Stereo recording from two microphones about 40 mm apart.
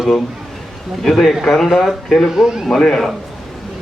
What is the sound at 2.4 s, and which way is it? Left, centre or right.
Speech, centre.